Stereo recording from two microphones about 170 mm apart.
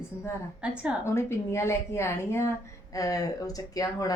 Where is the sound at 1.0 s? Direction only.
15° left (ahead or behind).